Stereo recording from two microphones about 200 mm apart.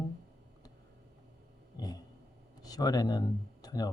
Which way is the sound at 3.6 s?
20° left (ahead or behind).